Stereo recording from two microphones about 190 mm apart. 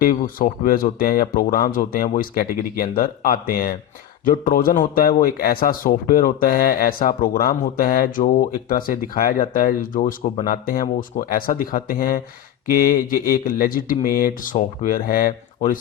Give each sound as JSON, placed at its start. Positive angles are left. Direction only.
{"t": 0.0, "sound": "a man's voice", "side_deg": 45}